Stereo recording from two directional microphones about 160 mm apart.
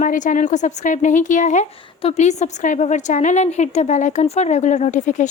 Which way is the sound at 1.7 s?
35° left (ahead or behind).